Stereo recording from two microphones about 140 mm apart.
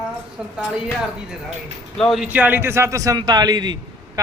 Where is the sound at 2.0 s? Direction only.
Centre (ahead or behind).